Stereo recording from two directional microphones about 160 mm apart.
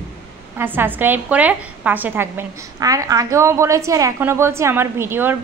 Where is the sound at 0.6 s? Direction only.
10° right (ahead or behind).